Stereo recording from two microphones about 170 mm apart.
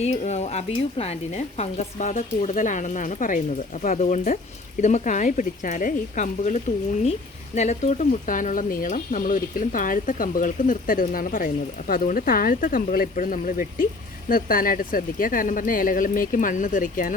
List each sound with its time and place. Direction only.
0.0 s speech: 40° left (ahead or behind)